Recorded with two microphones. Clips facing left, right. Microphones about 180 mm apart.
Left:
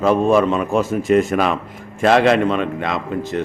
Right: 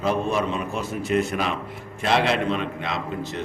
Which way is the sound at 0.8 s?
90° left.